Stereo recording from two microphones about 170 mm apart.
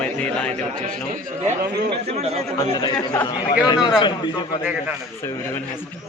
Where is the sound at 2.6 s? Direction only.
25° left (ahead or behind).